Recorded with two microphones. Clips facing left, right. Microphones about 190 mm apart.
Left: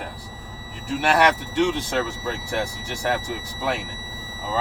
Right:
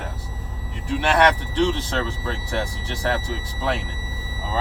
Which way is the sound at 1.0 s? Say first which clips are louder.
Right 1 dB; 10° left (ahead or behind).